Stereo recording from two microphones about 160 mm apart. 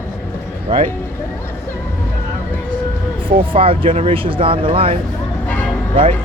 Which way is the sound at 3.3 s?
35° right (ahead or behind).